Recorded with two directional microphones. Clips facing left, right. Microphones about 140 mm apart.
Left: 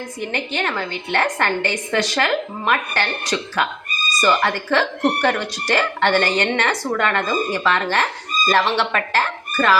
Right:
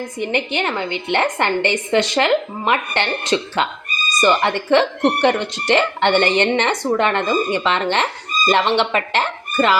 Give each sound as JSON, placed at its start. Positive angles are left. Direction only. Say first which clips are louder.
{"t": 0.2, "sound": "speech", "louder": "right 4 dB", "side_deg": -20}